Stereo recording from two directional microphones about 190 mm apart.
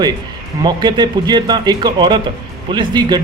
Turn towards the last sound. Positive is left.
turn(degrees=-20)  # may be behind; listen again after turning